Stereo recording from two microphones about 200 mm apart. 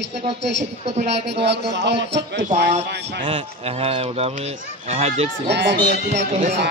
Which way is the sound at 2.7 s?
30° right (ahead or behind).